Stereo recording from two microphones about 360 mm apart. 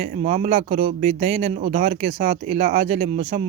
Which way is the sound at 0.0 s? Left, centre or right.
Centre.